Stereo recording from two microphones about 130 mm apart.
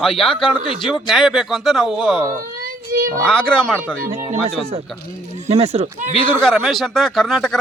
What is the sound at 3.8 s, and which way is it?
Speech, 15° right (ahead or behind).